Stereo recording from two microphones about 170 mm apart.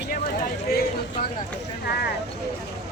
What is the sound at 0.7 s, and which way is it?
Speech, 65° left (ahead or behind).